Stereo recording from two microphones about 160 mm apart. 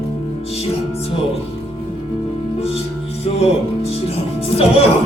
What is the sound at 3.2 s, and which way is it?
Music, 40° left (ahead or behind).